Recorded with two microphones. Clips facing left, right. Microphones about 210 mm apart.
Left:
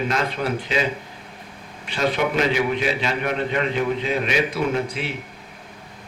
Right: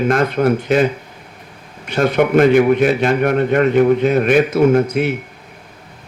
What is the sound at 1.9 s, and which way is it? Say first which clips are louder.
Speech: right 8 dB; 50° right (ahead or behind).